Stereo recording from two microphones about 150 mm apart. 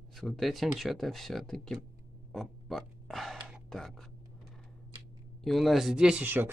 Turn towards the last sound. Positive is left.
turn(degrees=-10)  # may be behind; listen again after turning